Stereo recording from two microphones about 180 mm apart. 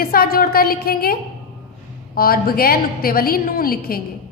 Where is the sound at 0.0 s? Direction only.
55° left (ahead or behind).